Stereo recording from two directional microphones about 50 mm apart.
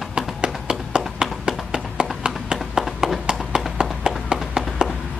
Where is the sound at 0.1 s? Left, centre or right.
Centre.